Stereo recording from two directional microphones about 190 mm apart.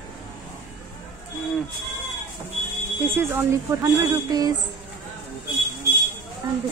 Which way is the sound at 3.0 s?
10° right (ahead or behind).